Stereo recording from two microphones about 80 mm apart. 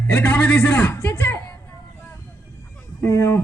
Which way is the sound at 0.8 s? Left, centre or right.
Left.